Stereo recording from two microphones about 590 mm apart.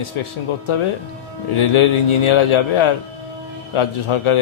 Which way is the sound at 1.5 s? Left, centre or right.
Left.